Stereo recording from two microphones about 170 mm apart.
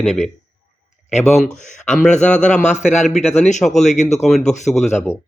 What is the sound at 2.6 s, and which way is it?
Speech, 40° left (ahead or behind).